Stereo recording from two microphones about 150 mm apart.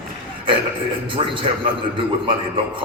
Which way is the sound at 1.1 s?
35° right (ahead or behind).